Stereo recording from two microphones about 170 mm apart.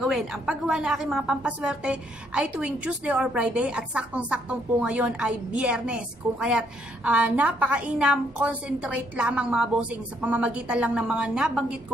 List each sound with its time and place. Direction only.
0.0 s a woman's voice: centre (ahead or behind)